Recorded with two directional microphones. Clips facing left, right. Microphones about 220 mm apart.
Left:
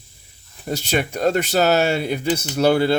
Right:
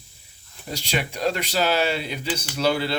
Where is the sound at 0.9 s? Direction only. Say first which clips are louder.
Left 5 dB; 50° left (ahead or behind).